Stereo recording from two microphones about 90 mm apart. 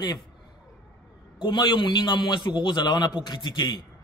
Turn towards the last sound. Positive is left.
turn(degrees=55)  # may be behind; listen again after turning